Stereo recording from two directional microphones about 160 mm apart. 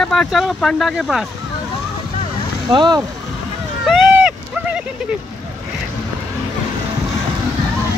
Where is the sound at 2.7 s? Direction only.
25° right (ahead or behind).